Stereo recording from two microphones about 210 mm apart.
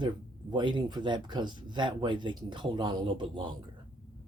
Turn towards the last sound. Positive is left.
turn(degrees=-20)  # may be behind; listen again after turning